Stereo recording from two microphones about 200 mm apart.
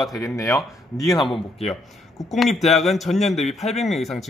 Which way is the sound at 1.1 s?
Centre (ahead or behind).